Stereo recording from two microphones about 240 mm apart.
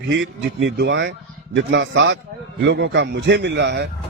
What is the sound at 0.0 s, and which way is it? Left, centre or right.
Speech, right.